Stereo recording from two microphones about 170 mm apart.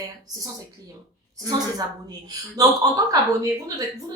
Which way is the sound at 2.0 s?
20° right (ahead or behind).